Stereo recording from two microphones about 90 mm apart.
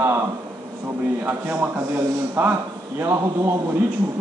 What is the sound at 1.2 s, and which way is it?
A man's voice, 20° right (ahead or behind).